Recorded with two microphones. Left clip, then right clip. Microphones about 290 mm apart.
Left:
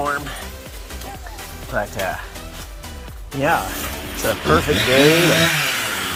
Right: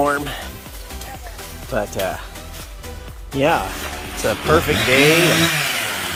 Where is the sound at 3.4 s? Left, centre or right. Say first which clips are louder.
Right 1 dB; right.